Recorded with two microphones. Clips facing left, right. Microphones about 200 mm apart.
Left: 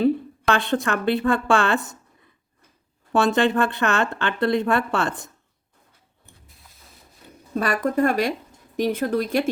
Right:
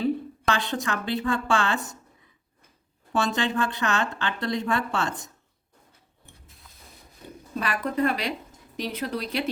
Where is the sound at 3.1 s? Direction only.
60° left (ahead or behind).